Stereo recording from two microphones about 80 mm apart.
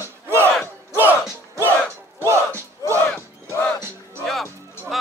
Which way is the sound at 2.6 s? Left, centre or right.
Right.